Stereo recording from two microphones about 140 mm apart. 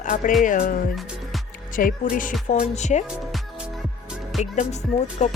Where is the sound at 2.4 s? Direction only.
60° left (ahead or behind).